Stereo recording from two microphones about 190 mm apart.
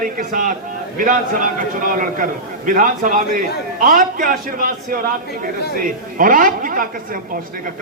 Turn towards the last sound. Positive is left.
turn(degrees=-45)  # may be behind; listen again after turning